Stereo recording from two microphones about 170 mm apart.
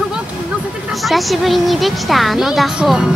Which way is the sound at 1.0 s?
Centre (ahead or behind).